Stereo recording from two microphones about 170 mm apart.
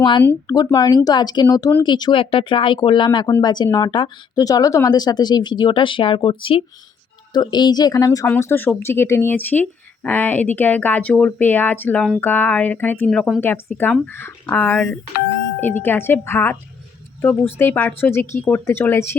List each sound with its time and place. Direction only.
0.4 s speech: 20° left (ahead or behind); by 13.4 s centre (ahead or behind)
13.4 s speech: 10° left (ahead or behind)
17.6 s speech: 10° left (ahead or behind)